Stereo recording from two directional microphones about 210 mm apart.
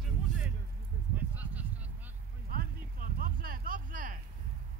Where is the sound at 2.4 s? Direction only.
40° right (ahead or behind).